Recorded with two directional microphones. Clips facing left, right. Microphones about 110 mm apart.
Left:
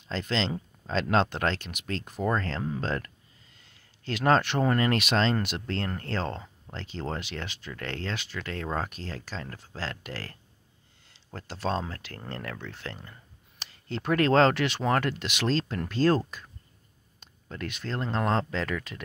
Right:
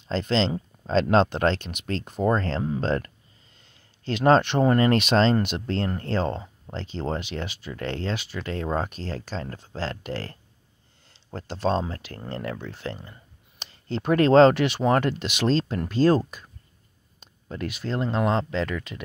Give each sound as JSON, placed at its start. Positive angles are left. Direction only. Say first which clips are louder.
{"t": 0.1, "sound": "speech", "louder": "right 6 dB", "side_deg": -30}
{"t": 11.3, "sound": "speech", "louder": "right 5 dB", "side_deg": -25}
{"t": 17.2, "sound": "speech", "louder": "right 5 dB", "side_deg": -15}